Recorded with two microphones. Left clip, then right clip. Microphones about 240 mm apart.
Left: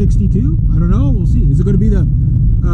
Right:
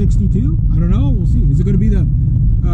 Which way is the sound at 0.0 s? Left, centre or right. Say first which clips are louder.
Left 2 dB; left.